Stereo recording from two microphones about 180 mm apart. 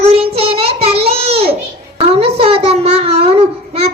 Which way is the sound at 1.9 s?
30° right (ahead or behind).